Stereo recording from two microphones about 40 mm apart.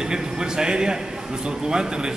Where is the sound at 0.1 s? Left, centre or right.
Centre.